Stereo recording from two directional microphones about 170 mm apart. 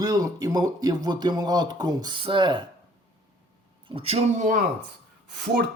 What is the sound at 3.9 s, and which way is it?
Speech, 35° right (ahead or behind).